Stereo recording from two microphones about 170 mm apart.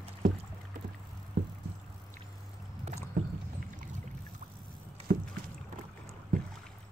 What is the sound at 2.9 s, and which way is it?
Rowboat, 40° right (ahead or behind).